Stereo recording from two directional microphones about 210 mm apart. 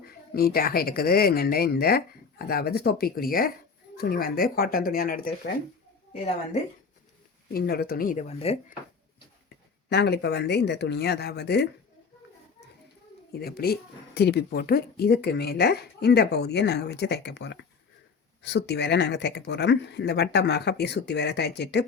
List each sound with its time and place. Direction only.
0.0 s speech: 45° left (ahead or behind)
7.5 s speech: 45° left (ahead or behind); by 8.5 s 30° left (ahead or behind)
9.9 s speech: 55° left (ahead or behind)
13.3 s speech: 50° left (ahead or behind)